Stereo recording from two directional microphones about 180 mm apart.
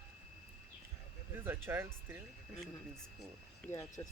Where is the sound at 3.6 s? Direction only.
15° left (ahead or behind).